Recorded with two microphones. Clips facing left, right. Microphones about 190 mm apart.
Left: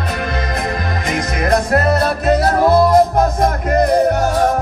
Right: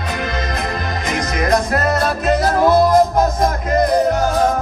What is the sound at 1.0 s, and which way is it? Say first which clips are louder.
Music: even; 55° left (ahead or behind).